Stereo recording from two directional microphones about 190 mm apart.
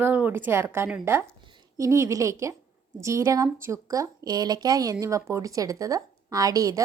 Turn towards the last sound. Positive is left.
turn(degrees=-20)  # may be behind; listen again after turning